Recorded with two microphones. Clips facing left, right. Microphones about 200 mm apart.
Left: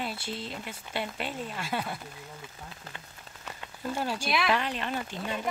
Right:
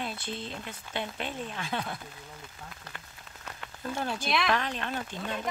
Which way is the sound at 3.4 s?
5° left (ahead or behind).